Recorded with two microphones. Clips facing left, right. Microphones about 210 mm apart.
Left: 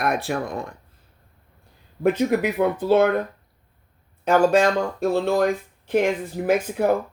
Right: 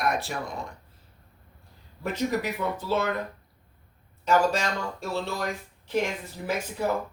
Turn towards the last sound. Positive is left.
turn(degrees=55)  # may be behind; listen again after turning